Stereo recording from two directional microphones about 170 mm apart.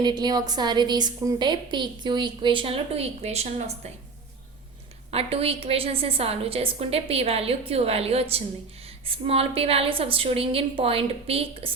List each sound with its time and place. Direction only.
0.0 s a woman's voice: 25° right (ahead or behind); by 3.9 s 40° right (ahead or behind)
5.1 s a woman's voice: 35° right (ahead or behind)